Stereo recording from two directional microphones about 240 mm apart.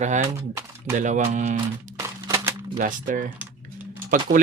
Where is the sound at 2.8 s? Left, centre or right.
Right.